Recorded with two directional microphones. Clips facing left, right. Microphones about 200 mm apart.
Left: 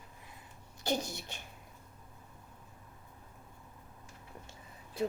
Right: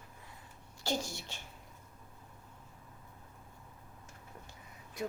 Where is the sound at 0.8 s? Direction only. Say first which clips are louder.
Left 2 dB; 20° left (ahead or behind).